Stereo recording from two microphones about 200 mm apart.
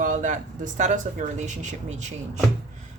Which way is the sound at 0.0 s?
40° right (ahead or behind).